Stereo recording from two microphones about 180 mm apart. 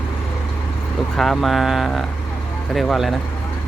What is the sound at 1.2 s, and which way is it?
A man's voice, centre (ahead or behind).